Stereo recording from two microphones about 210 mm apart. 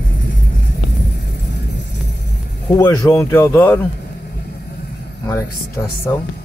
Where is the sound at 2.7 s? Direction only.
10° left (ahead or behind).